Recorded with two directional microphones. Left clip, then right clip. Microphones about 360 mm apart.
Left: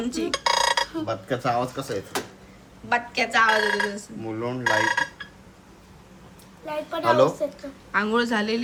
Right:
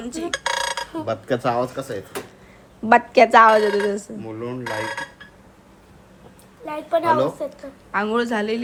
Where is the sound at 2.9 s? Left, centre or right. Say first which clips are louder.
Right 10 dB; centre.